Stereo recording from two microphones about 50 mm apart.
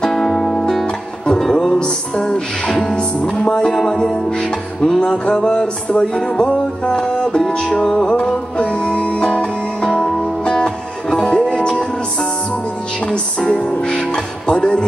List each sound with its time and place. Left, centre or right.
0.0 s music: centre
9.8 s music: centre
10.4 s music: centre
13.0 s music: left